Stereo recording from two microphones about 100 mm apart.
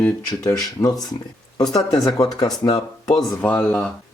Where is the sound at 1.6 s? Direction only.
5° left (ahead or behind).